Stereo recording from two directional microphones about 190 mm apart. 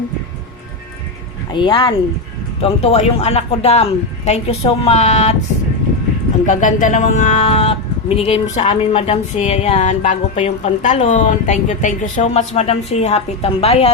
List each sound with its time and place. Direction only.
1.5 s speech: 25° left (ahead or behind)
6.4 s speech: 40° left (ahead or behind)